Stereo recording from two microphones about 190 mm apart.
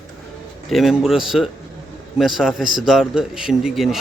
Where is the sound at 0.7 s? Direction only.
Centre (ahead or behind).